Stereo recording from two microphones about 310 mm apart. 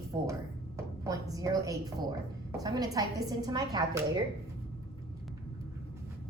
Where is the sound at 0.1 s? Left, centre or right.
Centre.